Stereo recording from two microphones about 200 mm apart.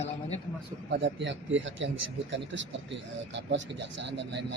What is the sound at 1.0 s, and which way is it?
Speech, 60° right (ahead or behind).